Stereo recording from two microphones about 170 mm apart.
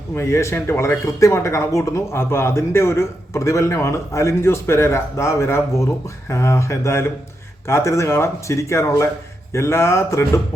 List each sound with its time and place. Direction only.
0.1 s speech: 15° left (ahead or behind)